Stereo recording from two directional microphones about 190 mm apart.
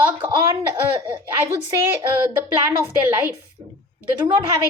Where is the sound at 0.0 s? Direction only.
25° right (ahead or behind).